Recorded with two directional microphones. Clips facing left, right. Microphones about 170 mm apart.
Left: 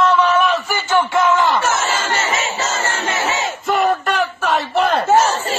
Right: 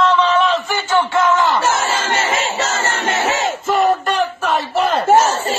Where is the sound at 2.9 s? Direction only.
50° right (ahead or behind).